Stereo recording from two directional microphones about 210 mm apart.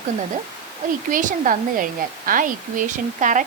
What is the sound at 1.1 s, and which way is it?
Speech, 40° right (ahead or behind).